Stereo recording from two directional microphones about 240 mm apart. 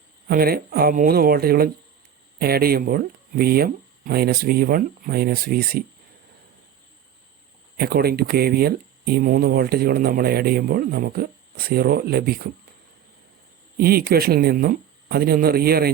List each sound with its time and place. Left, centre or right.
0.3 s speech: right
7.8 s speech: right
13.7 s speech: right